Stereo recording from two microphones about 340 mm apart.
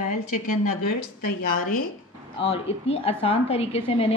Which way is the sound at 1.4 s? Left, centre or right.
Left.